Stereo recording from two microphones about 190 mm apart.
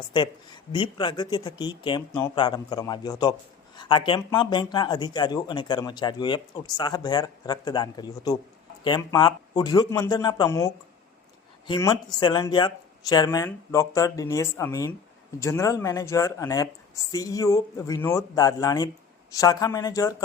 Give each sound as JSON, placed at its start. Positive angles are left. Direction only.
{"t": 0.1, "sound": "speech", "side_deg": 25}